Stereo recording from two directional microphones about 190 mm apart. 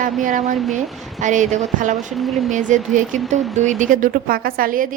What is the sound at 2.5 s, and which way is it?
A woman's voice, 40° right (ahead or behind).